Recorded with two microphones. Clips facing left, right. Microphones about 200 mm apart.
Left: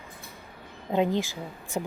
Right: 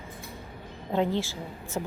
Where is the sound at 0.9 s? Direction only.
15° left (ahead or behind).